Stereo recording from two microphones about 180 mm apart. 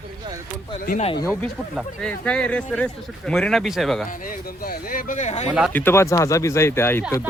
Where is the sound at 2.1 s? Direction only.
5° left (ahead or behind).